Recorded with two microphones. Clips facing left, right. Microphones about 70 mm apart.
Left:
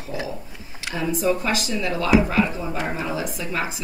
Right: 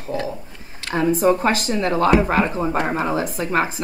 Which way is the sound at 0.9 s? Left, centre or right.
Right.